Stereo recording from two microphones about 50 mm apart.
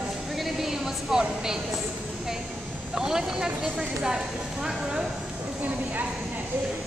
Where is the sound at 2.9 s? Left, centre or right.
Centre.